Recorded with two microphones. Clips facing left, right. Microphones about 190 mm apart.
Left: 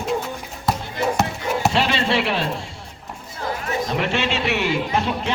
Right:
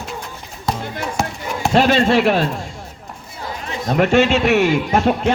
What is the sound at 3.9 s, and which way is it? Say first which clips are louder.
A man's voice: right 12 dB; 45° right (ahead or behind).